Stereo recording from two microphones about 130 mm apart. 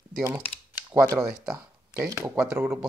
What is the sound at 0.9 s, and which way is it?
Speech, 25° right (ahead or behind).